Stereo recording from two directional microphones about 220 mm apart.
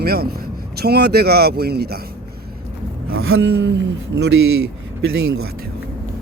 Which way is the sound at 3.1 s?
70° right (ahead or behind).